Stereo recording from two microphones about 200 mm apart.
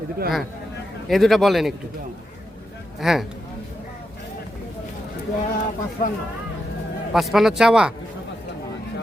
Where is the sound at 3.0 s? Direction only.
Centre (ahead or behind).